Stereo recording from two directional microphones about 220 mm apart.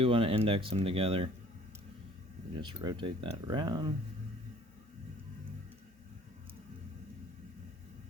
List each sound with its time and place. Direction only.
0.0 s speech: 25° right (ahead or behind)
2.6 s speech: 20° right (ahead or behind)